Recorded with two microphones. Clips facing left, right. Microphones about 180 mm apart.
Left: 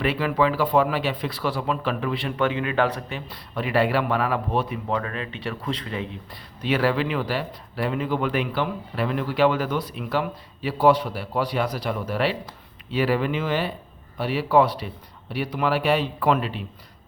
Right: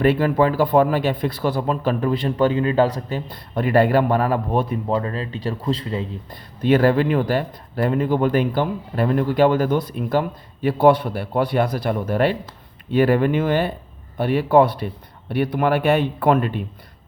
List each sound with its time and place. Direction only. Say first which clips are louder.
0.0 s speech: right 5 dB; 45° right (ahead or behind)
4.9 s speech: right 4 dB; 30° right (ahead or behind)
6.3 s speech: right 8 dB; 50° right (ahead or behind)